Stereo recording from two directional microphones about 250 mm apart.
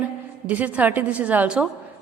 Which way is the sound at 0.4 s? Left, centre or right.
Centre.